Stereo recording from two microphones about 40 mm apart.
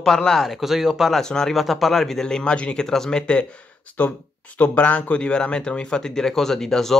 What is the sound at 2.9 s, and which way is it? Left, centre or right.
Speech, centre.